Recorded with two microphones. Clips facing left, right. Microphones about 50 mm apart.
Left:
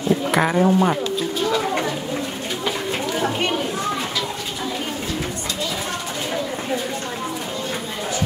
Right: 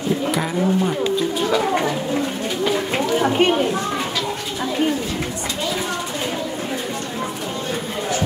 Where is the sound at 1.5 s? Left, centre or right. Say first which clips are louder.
Right 3 dB; centre.